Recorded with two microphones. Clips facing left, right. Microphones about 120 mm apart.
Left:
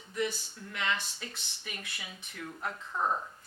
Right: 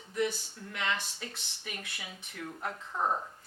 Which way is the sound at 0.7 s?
50° right (ahead or behind).